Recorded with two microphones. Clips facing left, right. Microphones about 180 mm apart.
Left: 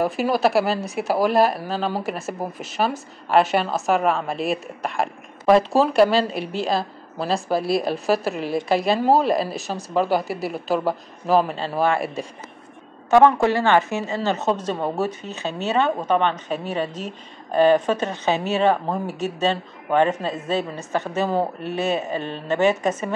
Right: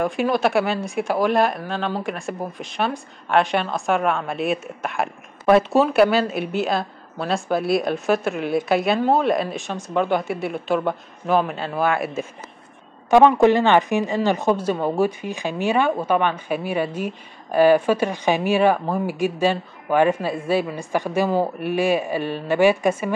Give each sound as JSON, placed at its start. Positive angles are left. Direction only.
{"t": 0.0, "sound": "speech", "side_deg": 5}
{"t": 11.5, "sound": "speech", "side_deg": 30}
{"t": 11.8, "sound": "speech", "side_deg": 0}
{"t": 13.1, "sound": "speech", "side_deg": -15}